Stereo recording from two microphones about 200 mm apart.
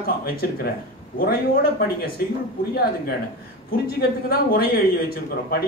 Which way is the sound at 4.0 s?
50° left (ahead or behind).